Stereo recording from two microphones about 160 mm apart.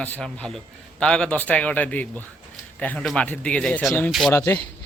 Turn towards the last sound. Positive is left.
turn(degrees=15)  # may be behind; listen again after turning